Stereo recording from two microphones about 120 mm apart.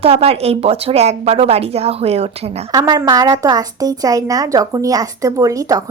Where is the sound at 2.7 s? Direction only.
30° right (ahead or behind).